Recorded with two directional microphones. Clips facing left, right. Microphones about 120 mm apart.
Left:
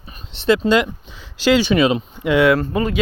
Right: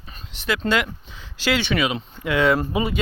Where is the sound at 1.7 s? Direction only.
30° left (ahead or behind).